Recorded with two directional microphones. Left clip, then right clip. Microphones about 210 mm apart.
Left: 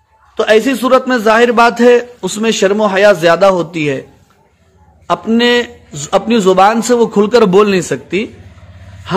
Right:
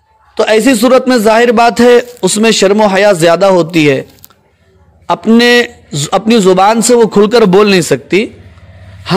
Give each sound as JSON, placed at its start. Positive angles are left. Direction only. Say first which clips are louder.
{"t": 0.3, "sound": "a man's voice", "louder": "right 2 dB", "side_deg": -30}